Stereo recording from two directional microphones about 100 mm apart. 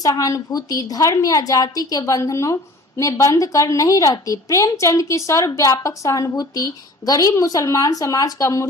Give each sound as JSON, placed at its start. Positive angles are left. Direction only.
{"t": 0.0, "sound": "a woman's voice", "side_deg": 35}